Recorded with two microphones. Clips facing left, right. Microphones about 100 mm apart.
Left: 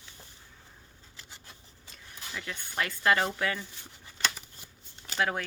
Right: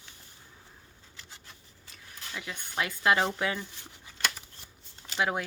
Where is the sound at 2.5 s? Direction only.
15° right (ahead or behind).